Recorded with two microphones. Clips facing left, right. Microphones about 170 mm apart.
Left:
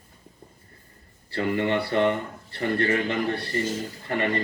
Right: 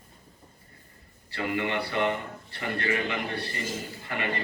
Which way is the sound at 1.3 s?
35° left (ahead or behind).